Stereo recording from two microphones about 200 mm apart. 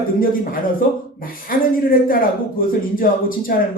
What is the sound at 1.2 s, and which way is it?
Speech, 45° left (ahead or behind).